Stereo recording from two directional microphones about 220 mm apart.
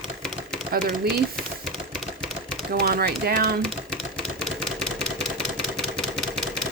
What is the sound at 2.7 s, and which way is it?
Speech, 45° right (ahead or behind).